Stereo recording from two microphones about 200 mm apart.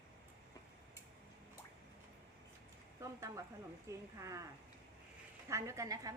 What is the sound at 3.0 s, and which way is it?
Speech, 15° right (ahead or behind).